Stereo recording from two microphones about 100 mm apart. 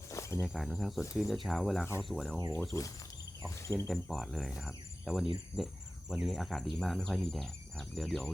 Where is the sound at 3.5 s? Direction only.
30° left (ahead or behind).